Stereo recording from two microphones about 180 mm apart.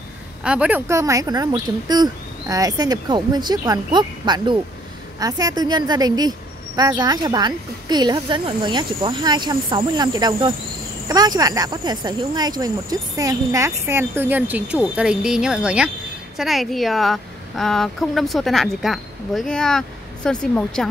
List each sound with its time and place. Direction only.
0.4 s a woman's voice: 5° right (ahead or behind)